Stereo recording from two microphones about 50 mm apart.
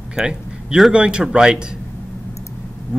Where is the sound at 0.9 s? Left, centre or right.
Centre.